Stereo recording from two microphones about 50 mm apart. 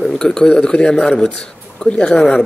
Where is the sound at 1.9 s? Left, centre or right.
Centre.